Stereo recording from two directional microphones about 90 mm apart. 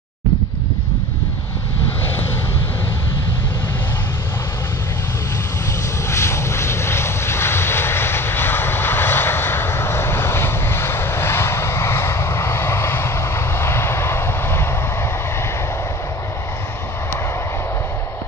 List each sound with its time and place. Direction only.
6.0 s vehicle: 30° left (ahead or behind)